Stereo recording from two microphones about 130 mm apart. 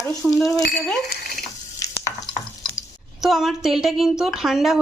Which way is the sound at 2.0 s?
20° left (ahead or behind).